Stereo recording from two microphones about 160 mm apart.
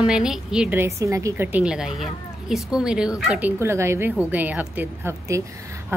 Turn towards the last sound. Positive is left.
turn(degrees=-10)  # may be behind; listen again after turning